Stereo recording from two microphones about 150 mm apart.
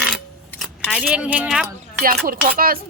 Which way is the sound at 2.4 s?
75° right (ahead or behind).